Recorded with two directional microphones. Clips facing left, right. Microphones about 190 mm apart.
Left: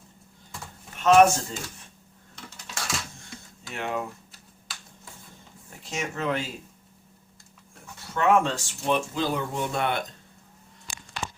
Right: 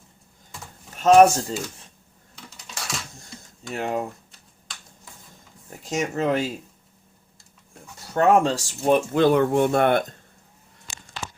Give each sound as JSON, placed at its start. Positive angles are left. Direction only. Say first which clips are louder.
{"t": 0.9, "sound": "speech", "louder": "right 3 dB", "side_deg": -35}
{"t": 2.3, "sound": "typing", "louder": "left 1 dB", "side_deg": 0}
{"t": 3.7, "sound": "speech", "louder": "right 4 dB", "side_deg": -40}
{"t": 5.7, "sound": "speech", "louder": "right 7 dB", "side_deg": -40}
{"t": 8.1, "sound": "speech", "louder": "right 4 dB", "side_deg": -40}